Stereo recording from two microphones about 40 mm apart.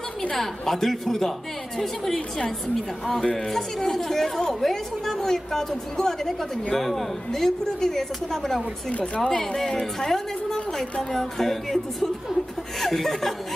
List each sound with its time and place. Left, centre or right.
0.3 s a woman's voice: centre
8.9 s a woman's voice: left
9.2 s a woman's voice: centre